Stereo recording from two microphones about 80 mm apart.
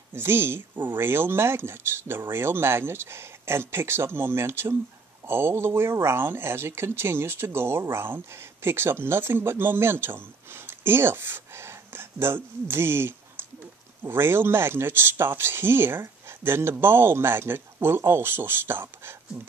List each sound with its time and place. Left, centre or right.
0.1 s speech: right